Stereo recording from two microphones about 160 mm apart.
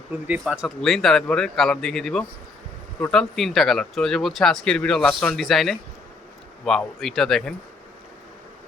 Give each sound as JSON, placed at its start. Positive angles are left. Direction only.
{"t": 0.1, "sound": "speech", "side_deg": -15}